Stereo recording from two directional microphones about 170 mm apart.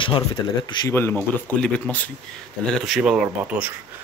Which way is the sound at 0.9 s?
10° left (ahead or behind).